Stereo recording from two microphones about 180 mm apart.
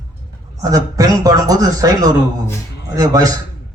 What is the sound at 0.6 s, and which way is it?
A man's voice, 20° right (ahead or behind).